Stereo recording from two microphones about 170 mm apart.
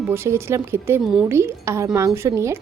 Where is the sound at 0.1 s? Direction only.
15° right (ahead or behind).